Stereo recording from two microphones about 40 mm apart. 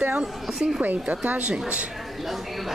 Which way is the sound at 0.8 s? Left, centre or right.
Right.